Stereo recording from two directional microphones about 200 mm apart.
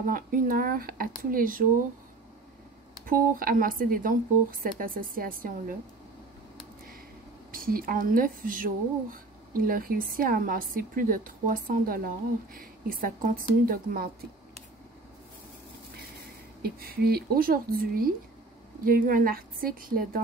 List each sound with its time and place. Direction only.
0.1 s speech: 45° right (ahead or behind)
3.1 s speech: 45° right (ahead or behind)
7.5 s speech: 45° right (ahead or behind)
16.6 s speech: 50° right (ahead or behind)